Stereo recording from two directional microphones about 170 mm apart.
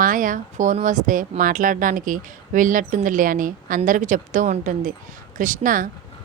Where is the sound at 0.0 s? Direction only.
50° right (ahead or behind).